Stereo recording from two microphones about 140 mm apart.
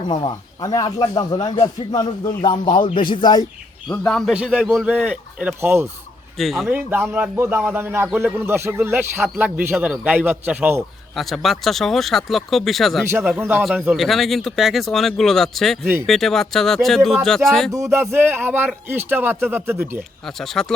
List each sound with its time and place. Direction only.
0.1 s speech: 30° left (ahead or behind)
3.9 s a man's voice: 5° left (ahead or behind); by 5.8 s 10° right (ahead or behind)
6.4 s speech: centre (ahead or behind)
6.7 s a man's voice: 15° right (ahead or behind)
11.2 s speech: centre (ahead or behind)
13.4 s a man's voice: 15° right (ahead or behind)
13.9 s speech: centre (ahead or behind)
17.7 s a man's voice: 20° right (ahead or behind)
20.4 s speech: 5° left (ahead or behind)